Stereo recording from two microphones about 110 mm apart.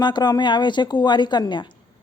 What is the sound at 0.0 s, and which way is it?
A woman's voice, 40° left (ahead or behind).